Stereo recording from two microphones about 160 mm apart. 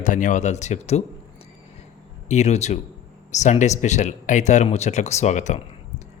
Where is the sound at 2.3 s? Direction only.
45° left (ahead or behind).